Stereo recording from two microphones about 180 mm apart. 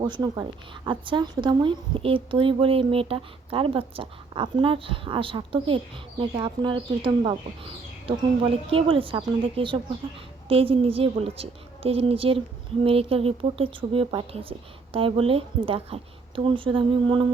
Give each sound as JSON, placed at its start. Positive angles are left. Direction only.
{"t": 0.0, "sound": "a woman's voice", "side_deg": -25}